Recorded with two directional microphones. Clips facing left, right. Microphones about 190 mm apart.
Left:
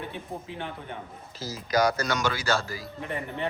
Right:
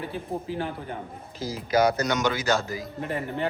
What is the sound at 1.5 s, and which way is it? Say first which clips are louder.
Speech: right 2 dB; 25° right (ahead or behind).